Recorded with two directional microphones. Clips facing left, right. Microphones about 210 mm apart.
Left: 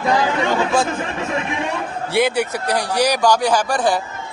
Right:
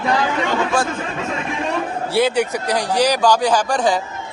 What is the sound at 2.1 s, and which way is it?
A man's voice, 10° left (ahead or behind).